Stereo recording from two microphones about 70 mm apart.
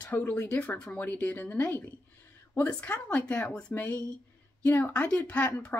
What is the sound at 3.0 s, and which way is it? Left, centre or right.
Speech, centre.